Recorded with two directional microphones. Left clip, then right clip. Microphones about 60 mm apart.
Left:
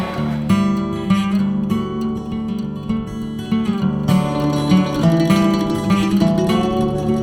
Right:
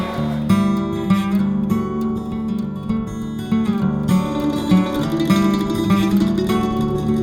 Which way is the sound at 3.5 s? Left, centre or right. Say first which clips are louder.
Even; left.